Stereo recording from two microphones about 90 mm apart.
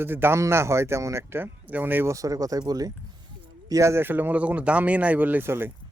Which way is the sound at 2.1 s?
40° right (ahead or behind).